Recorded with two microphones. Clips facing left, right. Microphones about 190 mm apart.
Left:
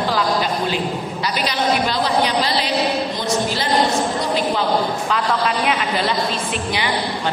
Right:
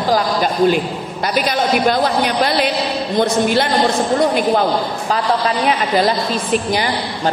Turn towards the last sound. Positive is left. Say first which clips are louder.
# right 6 dB
turn(degrees=-40)  # may be behind; listen again after turning